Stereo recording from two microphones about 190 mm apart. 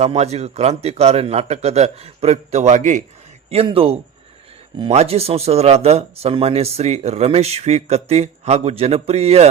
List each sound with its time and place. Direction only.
0.0 s speech: 35° right (ahead or behind)